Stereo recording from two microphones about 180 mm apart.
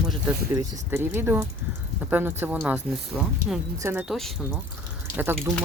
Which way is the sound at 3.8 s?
15° right (ahead or behind).